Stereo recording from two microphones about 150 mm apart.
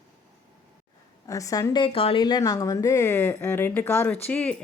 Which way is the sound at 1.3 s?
20° left (ahead or behind).